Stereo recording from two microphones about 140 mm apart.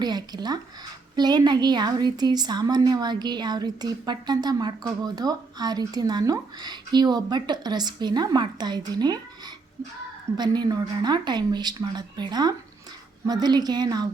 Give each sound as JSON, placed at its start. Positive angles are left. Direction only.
{"t": 0.0, "sound": "a woman's voice", "side_deg": -30}
{"t": 10.3, "sound": "a woman's voice", "side_deg": -30}